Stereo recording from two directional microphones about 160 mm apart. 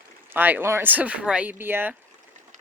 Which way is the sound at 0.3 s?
10° right (ahead or behind).